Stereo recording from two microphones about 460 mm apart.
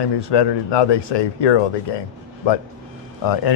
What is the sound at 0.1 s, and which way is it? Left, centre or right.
Speech, left.